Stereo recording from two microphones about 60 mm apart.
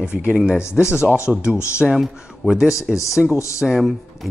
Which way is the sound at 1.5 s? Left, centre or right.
Left.